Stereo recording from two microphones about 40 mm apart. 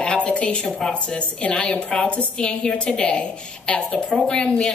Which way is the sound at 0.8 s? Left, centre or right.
Centre.